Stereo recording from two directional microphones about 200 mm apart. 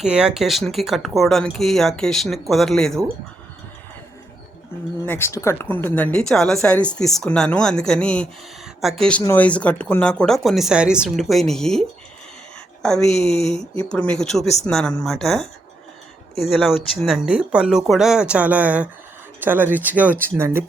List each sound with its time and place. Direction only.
0.0 s a woman's voice: 5° right (ahead or behind)
5.0 s a woman's voice: 10° left (ahead or behind); by 20.7 s 10° right (ahead or behind)